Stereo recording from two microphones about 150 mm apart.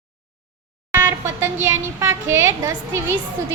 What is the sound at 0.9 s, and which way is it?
Speech, 15° right (ahead or behind).